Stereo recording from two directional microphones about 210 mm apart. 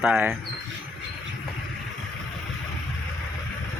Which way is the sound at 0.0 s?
Centre (ahead or behind).